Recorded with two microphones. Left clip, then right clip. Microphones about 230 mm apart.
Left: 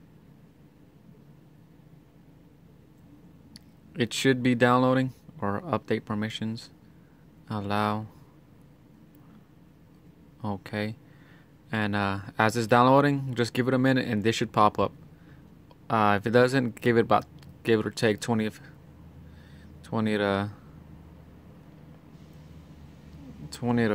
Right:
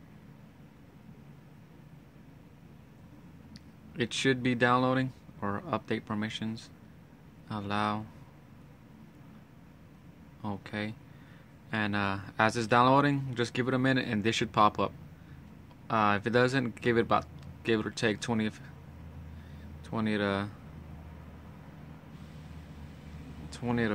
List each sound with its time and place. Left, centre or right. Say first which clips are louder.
3.5 s speech: left 4 dB; left
10.4 s speech: left 4 dB; left
15.9 s speech: left 4 dB; left
19.8 s speech: left 5 dB; left
23.5 s speech: left 5 dB; left